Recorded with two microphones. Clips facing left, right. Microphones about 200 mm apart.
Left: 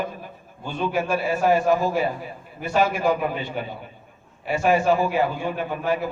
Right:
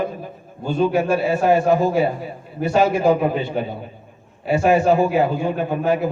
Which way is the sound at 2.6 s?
40° right (ahead or behind).